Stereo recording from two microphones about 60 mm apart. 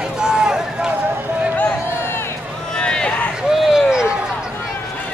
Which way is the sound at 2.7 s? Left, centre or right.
Centre.